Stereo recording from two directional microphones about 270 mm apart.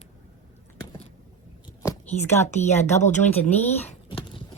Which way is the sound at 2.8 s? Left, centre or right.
Left.